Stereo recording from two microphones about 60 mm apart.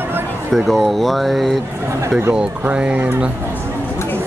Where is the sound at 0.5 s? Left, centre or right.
Centre.